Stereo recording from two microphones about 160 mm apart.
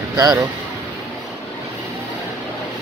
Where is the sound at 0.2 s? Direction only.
25° right (ahead or behind).